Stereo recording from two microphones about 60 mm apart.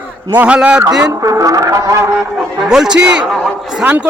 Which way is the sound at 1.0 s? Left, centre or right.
Right.